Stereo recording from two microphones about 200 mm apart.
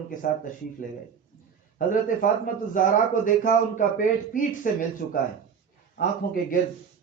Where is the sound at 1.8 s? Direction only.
45° left (ahead or behind).